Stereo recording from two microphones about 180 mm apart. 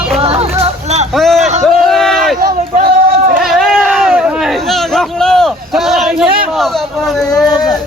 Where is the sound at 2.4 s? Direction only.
55° right (ahead or behind).